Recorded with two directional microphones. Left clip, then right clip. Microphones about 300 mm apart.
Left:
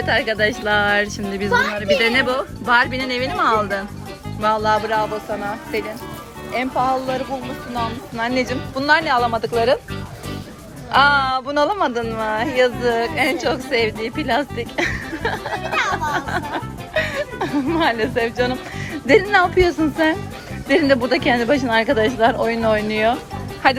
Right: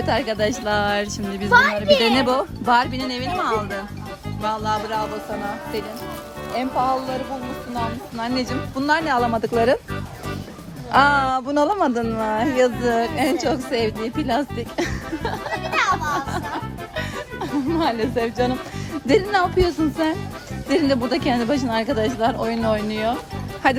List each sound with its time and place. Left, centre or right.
0.0 s speech: centre
6.5 s speech: centre
8.2 s speech: centre
10.9 s speech: right
15.5 s a child's voice: centre
17.4 s speech: centre